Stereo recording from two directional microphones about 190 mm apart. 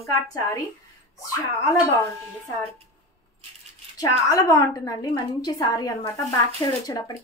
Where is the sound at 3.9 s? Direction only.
20° left (ahead or behind).